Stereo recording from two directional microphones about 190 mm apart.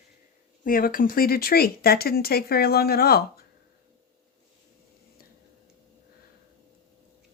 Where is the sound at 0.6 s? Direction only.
50° left (ahead or behind).